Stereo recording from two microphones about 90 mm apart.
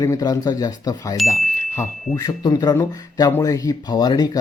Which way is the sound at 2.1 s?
45° left (ahead or behind).